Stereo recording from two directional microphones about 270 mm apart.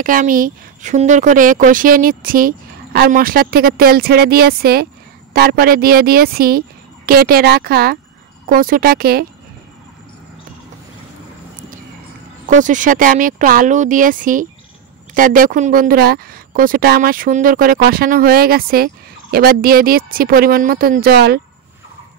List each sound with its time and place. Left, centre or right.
0.0 s a woman's voice: right
12.4 s a woman's voice: right